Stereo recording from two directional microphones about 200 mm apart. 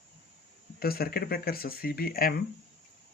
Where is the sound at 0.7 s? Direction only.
50° left (ahead or behind).